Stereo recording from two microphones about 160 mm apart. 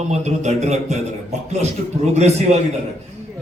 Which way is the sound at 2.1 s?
45° right (ahead or behind).